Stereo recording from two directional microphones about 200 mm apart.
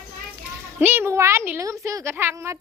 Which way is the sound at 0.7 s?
10° right (ahead or behind).